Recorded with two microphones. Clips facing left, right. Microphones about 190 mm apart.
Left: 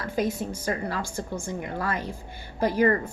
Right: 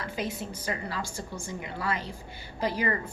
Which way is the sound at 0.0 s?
45° left (ahead or behind).